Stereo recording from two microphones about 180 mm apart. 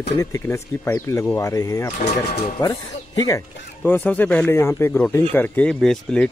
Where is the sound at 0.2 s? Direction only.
15° left (ahead or behind).